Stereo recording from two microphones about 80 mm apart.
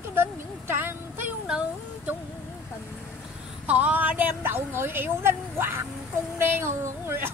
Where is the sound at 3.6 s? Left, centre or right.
Centre.